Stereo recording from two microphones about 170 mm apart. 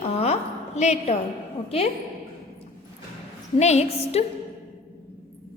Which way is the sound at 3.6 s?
40° left (ahead or behind).